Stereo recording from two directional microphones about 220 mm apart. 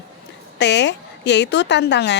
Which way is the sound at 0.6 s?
50° left (ahead or behind).